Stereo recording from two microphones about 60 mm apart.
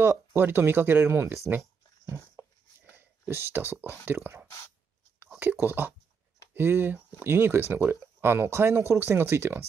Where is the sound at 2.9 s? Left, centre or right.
Right.